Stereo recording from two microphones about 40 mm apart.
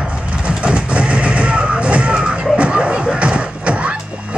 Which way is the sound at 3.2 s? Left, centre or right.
Right.